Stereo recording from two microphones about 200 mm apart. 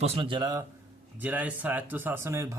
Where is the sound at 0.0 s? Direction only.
30° right (ahead or behind).